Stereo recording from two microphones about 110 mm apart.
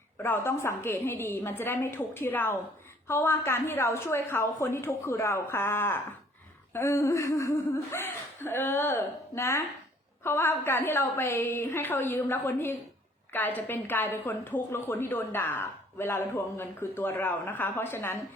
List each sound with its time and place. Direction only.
0.2 s a woman's voice: 20° left (ahead or behind)